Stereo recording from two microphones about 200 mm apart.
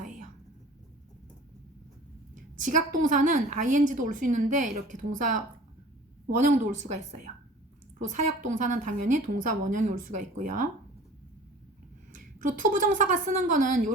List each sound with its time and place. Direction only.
2.3 s a woman's voice: 40° right (ahead or behind)
7.9 s a woman's voice: 40° right (ahead or behind)
12.1 s a woman's voice: 40° right (ahead or behind)